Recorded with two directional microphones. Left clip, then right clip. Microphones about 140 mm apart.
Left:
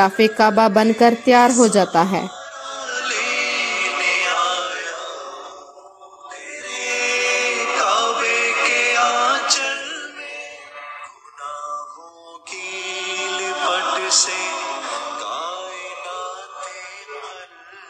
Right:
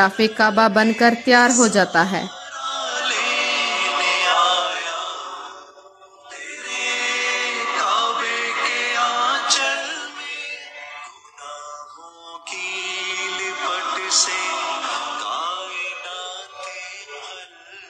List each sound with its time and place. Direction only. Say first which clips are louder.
0.0 s music: left 2 dB; 15° left (ahead or behind)
2.6 s chant: right 2 dB; 20° right (ahead or behind)
6.6 s chant: right 2 dB; 15° right (ahead or behind)
6.9 s chant: left 3 dB; 10° left (ahead or behind)
9.7 s music: right 2 dB; 35° right (ahead or behind)
12.4 s music: right 2 dB; 15° right (ahead or behind)
12.7 s mantra: left 1 dB; 5° left (ahead or behind)
13.0 s music: left 4 dB; 20° left (ahead or behind)
14.3 s music: right 1 dB; centre (ahead or behind)